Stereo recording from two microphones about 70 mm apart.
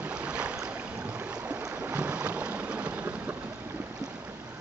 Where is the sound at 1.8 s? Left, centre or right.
Centre.